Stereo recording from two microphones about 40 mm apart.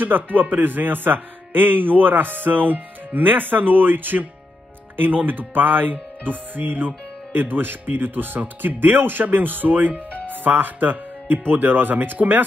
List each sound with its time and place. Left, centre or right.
0.0 s speech: right